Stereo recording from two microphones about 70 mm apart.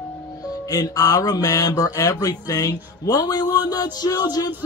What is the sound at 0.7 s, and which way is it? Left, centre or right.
Speech, left.